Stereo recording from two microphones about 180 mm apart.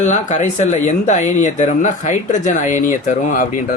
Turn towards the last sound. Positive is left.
turn(degrees=45)  # may be behind; listen again after turning